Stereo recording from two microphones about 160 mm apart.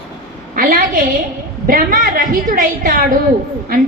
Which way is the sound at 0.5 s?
60° right (ahead or behind).